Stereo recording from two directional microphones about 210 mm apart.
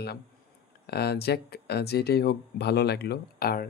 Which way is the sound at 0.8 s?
50° left (ahead or behind).